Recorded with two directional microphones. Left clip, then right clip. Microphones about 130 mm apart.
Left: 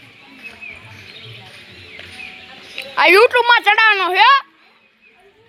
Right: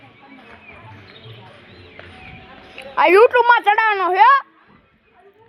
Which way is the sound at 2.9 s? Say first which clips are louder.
Left 2 dB; 5° right (ahead or behind).